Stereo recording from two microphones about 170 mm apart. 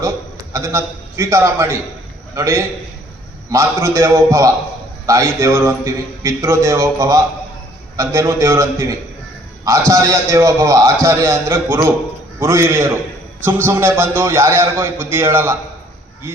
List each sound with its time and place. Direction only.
0.5 s a man's voice: 20° right (ahead or behind)